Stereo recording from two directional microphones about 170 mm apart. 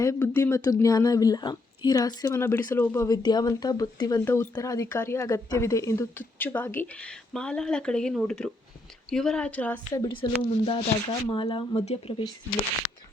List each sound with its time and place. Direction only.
0.0 s speech: 20° left (ahead or behind)
9.9 s speech: 25° left (ahead or behind)